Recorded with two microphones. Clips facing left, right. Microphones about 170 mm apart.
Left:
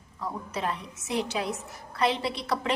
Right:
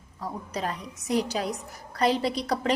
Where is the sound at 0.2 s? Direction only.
40° right (ahead or behind).